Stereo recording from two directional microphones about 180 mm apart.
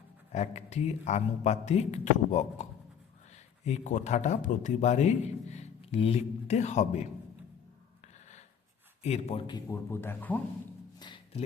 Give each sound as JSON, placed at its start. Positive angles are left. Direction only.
{"t": 0.3, "sound": "a man's voice", "side_deg": 35}
{"t": 9.0, "sound": "a man's voice", "side_deg": 35}
{"t": 9.9, "sound": "speech", "side_deg": 10}